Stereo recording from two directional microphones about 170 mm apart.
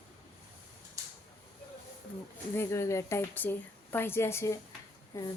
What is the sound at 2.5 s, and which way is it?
A woman's voice, 15° left (ahead or behind).